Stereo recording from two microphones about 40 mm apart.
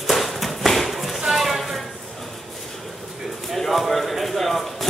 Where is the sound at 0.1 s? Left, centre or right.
Centre.